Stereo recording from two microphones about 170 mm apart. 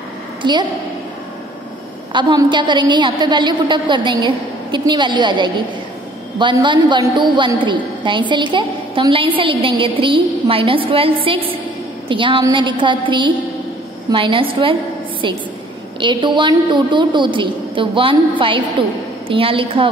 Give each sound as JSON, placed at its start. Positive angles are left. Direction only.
{"t": 0.4, "sound": "a woman's voice", "side_deg": -25}
{"t": 2.1, "sound": "a woman's voice", "side_deg": -25}